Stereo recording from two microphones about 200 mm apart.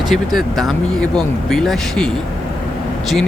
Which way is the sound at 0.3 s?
Centre (ahead or behind).